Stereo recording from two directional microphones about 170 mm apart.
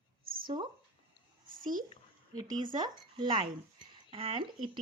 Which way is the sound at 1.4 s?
55° right (ahead or behind).